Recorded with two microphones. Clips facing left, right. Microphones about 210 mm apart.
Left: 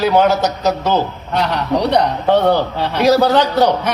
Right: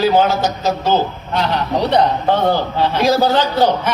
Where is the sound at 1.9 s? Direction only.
65° left (ahead or behind).